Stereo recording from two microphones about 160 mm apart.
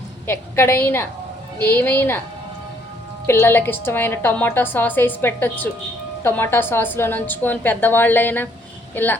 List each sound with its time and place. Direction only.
0.3 s a woman's voice: 15° left (ahead or behind)
3.2 s a woman's voice: 15° left (ahead or behind)